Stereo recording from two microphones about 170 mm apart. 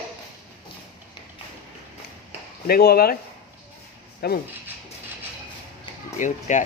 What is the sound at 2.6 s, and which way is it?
Speech, 60° left (ahead or behind).